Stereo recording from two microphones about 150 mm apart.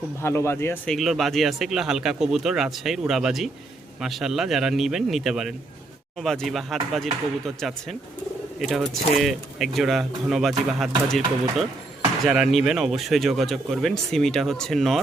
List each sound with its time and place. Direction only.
0.2 s speech: 15° left (ahead or behind)
0.9 s speech: centre (ahead or behind)